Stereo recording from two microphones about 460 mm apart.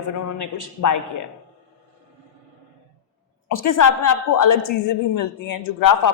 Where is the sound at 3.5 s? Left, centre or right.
Left.